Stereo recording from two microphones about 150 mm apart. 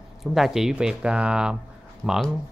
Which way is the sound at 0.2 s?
Centre (ahead or behind).